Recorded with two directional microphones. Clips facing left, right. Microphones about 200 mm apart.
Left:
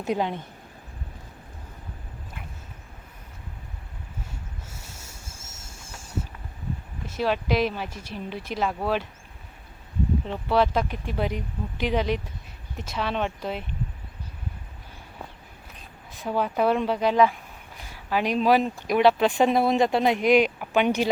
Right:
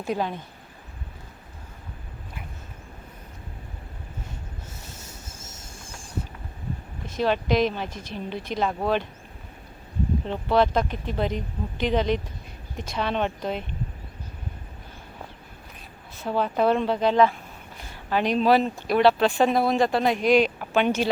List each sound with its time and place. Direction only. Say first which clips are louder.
0.0 s speech: left 1 dB; 20° left (ahead or behind)
4.8 s a sound: right 3 dB; 10° left (ahead or behind)
7.1 s speech: right 2 dB; 5° left (ahead or behind)
10.3 s speech: right 2 dB; 5° left (ahead or behind)
16.1 s speech: right 1 dB; 10° left (ahead or behind)